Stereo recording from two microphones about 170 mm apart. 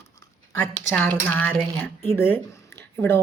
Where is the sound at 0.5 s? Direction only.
10° left (ahead or behind).